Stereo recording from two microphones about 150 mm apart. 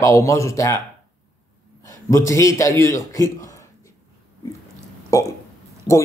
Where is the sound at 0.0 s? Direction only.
20° left (ahead or behind).